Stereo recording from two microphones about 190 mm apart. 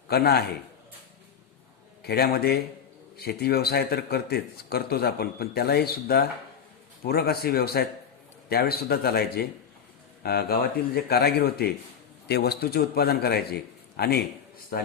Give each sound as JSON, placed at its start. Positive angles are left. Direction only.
{"t": 0.1, "sound": "speech", "side_deg": 55}
{"t": 2.0, "sound": "speech", "side_deg": 55}